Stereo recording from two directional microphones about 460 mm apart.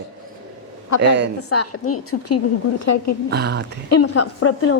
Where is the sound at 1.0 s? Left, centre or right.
Right.